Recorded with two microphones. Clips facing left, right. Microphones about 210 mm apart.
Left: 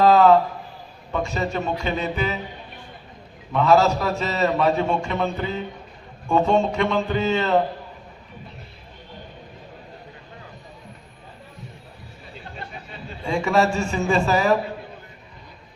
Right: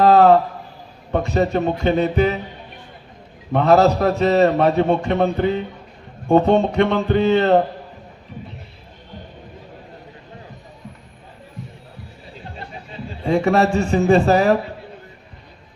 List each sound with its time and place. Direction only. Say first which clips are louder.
0.0 s a sound: right 3 dB; 55° right (ahead or behind)
1.1 s a man's voice: right 6 dB; 55° right (ahead or behind)
3.5 s a man's voice: right 3 dB; 55° right (ahead or behind)
13.3 s a man's voice: right 4 dB; 60° right (ahead or behind)